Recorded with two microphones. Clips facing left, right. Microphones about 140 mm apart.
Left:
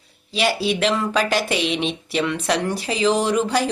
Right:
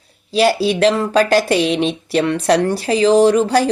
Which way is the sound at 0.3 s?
40° right (ahead or behind).